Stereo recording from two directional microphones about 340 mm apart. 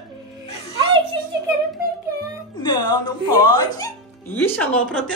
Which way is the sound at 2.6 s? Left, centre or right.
Centre.